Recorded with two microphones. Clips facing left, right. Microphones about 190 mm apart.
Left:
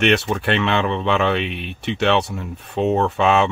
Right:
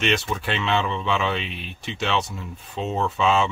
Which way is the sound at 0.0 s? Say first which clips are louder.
Left 6 dB; 65° left (ahead or behind).